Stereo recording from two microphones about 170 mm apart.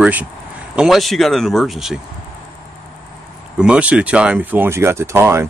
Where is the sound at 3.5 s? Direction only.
5° right (ahead or behind).